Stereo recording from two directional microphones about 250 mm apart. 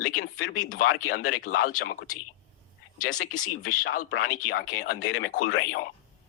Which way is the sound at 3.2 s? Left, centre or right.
Left.